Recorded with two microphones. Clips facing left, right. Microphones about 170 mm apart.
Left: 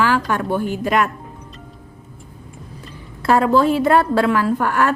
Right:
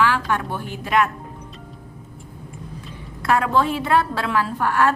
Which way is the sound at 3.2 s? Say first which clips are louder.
Left 5 dB; 35° left (ahead or behind).